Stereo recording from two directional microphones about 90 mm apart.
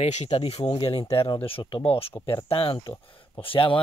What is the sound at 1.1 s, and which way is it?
Speech, 70° left (ahead or behind).